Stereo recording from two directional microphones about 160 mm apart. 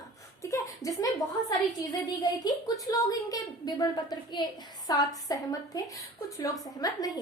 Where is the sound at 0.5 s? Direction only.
20° left (ahead or behind).